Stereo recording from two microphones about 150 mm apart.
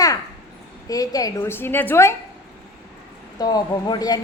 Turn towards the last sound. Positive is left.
turn(degrees=25)  # may be behind; listen again after turning